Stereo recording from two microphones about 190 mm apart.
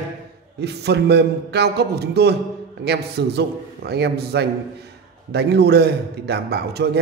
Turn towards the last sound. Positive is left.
turn(degrees=-60)  # may be behind; listen again after turning